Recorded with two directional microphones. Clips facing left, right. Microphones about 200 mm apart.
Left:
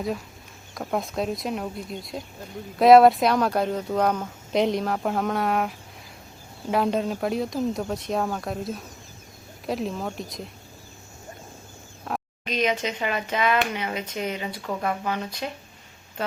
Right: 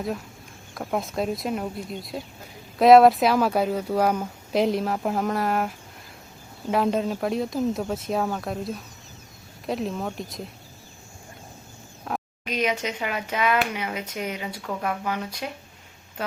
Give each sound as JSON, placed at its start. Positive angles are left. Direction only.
{"t": 0.7, "sound": "speech", "side_deg": -5}
{"t": 12.0, "sound": "speech", "side_deg": -5}